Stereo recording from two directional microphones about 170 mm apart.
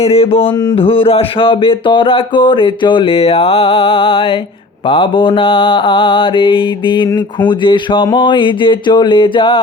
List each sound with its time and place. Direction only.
0.0 s speech: 35° left (ahead or behind)
4.9 s mantra: 30° left (ahead or behind)